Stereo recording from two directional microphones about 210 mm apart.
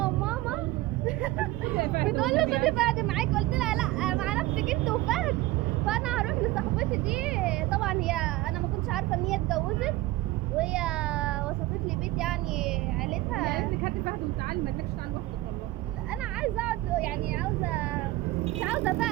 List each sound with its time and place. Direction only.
0.0 s vehicle: 5° right (ahead or behind)
1.8 s a sound: 45° right (ahead or behind)
2.0 s hubbub: centre (ahead or behind)
2.6 s vehicle: centre (ahead or behind)
5.8 s a sound: 5° right (ahead or behind)
8.9 s a child's voice: centre (ahead or behind)
16.4 s speech: 5° right (ahead or behind)
18.6 s speech: 5° right (ahead or behind)